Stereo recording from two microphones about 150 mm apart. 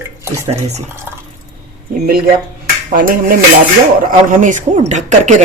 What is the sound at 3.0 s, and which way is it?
Dishes, 70° right (ahead or behind).